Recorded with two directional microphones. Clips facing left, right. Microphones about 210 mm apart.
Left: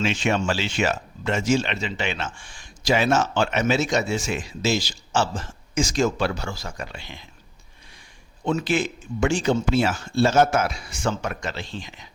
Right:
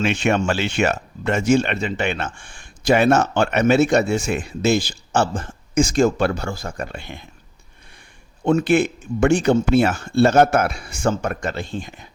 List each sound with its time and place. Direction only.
0.0 s speech: 60° right (ahead or behind)
8.4 s speech: 55° right (ahead or behind)